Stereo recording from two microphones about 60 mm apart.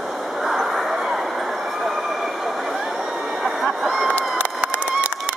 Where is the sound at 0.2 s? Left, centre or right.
Centre.